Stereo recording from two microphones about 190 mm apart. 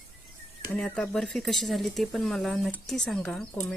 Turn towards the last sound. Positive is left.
turn(degrees=5)  # may be behind; listen again after turning